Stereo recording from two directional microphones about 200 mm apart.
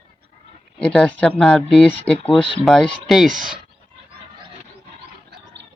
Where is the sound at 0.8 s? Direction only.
5° left (ahead or behind).